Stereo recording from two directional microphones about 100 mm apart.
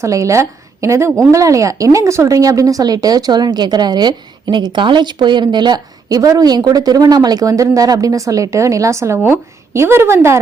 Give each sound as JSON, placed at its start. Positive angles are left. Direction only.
{"t": 0.0, "sound": "a woman's voice", "side_deg": -30}